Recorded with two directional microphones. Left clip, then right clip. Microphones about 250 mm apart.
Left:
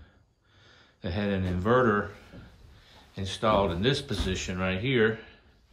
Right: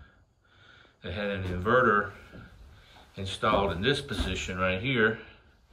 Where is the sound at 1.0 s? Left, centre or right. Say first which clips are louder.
Left 1 dB; centre.